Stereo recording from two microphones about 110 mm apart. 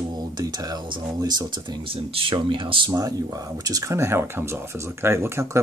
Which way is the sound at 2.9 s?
35° right (ahead or behind).